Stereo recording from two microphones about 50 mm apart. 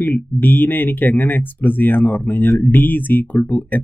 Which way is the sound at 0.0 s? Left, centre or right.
Left.